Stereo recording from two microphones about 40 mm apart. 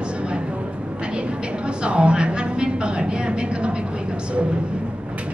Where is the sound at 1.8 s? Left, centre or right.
Right.